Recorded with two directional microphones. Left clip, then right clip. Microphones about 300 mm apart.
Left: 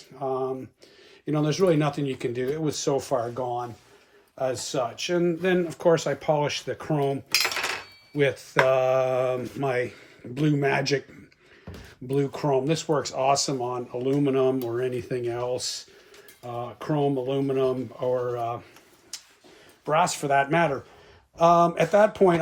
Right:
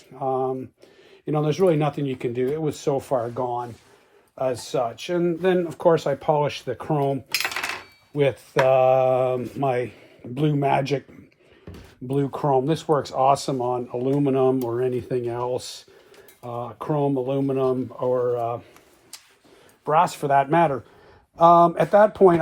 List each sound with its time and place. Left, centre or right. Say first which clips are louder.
0.2 s a sound: right 4 dB; centre
1.2 s speech: right 3 dB; centre
4.4 s speech: right 3 dB; centre
12.0 s speech: right 2 dB; centre
19.8 s speech: right 3 dB; centre